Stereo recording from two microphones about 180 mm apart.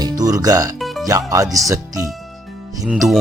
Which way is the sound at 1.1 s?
20° right (ahead or behind).